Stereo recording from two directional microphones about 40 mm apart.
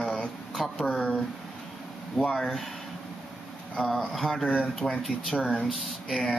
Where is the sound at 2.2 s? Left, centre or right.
Left.